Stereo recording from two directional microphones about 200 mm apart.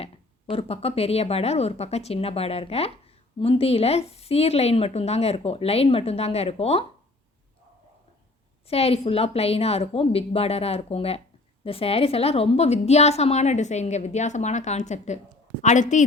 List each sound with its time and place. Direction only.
0.5 s a woman's voice: 30° left (ahead or behind)
8.6 s a woman's voice: 30° left (ahead or behind)